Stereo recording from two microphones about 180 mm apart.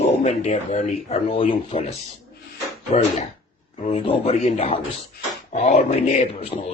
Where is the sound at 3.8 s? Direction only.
35° left (ahead or behind).